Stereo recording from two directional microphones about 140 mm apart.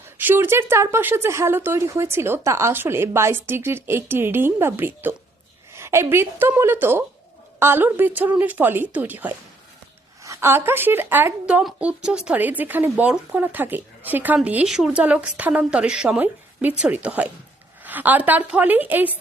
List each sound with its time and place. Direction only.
0.2 s speech: 15° right (ahead or behind)